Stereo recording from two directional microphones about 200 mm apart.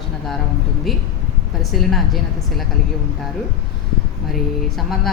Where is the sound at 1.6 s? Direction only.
Centre (ahead or behind).